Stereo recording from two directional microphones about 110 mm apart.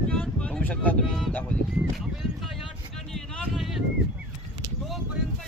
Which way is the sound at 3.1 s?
Centre (ahead or behind).